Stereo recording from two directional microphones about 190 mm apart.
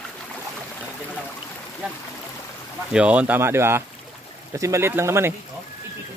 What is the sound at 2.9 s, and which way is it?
Speech, 5° right (ahead or behind).